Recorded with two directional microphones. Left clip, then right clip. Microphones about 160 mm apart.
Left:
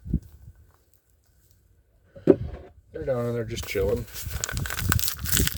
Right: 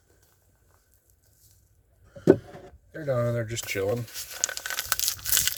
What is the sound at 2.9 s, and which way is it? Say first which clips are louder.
Speech: even; 30° left (ahead or behind).